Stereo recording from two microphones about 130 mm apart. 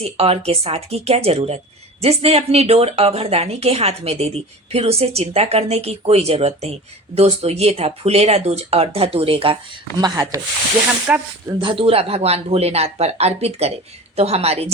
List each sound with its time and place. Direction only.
0.0 s speech: 50° right (ahead or behind)
10.0 s speech: 25° right (ahead or behind)
11.1 s speech: 10° right (ahead or behind)
11.6 s speech: 45° right (ahead or behind)